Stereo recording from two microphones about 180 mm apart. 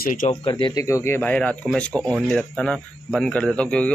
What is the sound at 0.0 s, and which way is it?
Speech, 45° left (ahead or behind).